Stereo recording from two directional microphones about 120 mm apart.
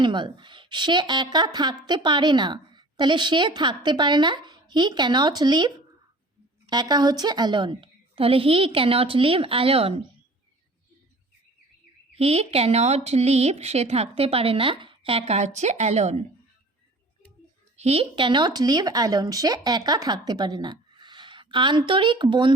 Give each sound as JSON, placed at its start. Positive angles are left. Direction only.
{"t": 0.0, "sound": "a woman's voice", "side_deg": -40}
{"t": 12.1, "sound": "speech", "side_deg": -55}
{"t": 15.3, "sound": "speech", "side_deg": -75}
{"t": 17.7, "sound": "a woman's voice", "side_deg": -60}
{"t": 18.0, "sound": "a woman's voice", "side_deg": -40}